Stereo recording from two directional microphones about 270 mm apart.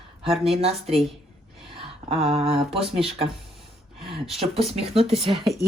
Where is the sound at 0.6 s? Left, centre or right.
Right.